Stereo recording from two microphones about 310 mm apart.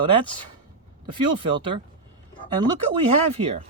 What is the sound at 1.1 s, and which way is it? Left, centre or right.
Speech, centre.